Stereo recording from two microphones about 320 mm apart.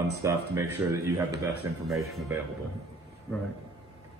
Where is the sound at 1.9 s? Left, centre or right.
Centre.